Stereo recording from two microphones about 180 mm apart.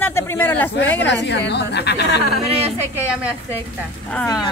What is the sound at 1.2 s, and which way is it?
Speech, 70° left (ahead or behind).